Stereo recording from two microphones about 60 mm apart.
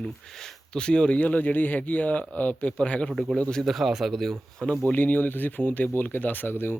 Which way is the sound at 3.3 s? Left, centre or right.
Centre.